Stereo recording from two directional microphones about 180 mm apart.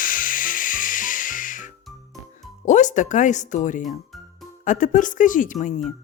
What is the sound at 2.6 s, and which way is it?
Speech, 45° left (ahead or behind).